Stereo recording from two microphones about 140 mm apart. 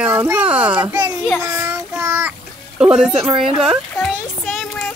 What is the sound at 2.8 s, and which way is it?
Children playing, 5° right (ahead or behind).